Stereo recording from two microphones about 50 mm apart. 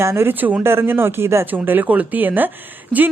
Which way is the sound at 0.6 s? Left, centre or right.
Right.